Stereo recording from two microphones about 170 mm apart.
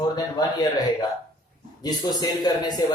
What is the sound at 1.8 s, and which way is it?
Speech, 25° left (ahead or behind).